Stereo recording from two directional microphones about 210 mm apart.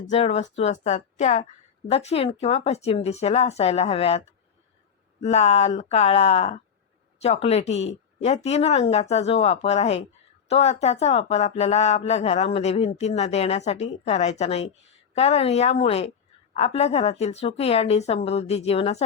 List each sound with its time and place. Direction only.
0.1 s a woman's voice: 30° left (ahead or behind)
5.2 s a woman's voice: 30° left (ahead or behind)